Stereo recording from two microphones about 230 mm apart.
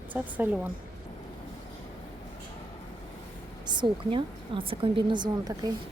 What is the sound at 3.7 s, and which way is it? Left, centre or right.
A woman's voice, right.